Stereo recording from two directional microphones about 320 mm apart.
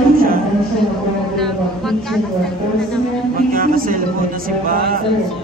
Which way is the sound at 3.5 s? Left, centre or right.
Right.